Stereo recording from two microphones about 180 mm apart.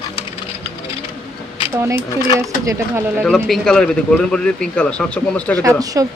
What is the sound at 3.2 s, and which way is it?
Speech, 5° left (ahead or behind).